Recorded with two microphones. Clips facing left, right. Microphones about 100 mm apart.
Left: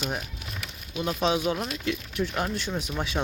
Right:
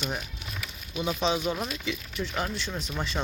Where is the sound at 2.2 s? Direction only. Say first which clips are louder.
Left 3 dB; 10° left (ahead or behind).